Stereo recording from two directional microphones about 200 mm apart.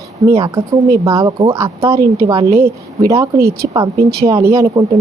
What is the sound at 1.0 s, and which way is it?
A woman's voice, 15° right (ahead or behind).